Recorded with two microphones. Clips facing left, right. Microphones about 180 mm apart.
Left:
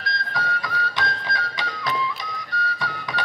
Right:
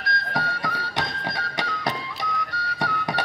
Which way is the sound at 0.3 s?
70° right (ahead or behind).